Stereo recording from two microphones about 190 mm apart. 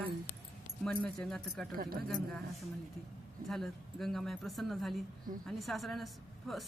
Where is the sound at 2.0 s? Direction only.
5° left (ahead or behind).